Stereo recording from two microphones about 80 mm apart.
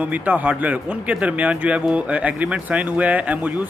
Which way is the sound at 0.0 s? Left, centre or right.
Centre.